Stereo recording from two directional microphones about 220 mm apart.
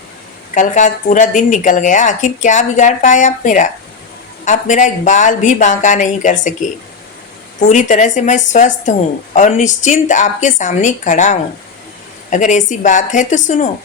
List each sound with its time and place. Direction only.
0.5 s a woman's voice: 35° left (ahead or behind)
7.7 s a woman's voice: 35° left (ahead or behind)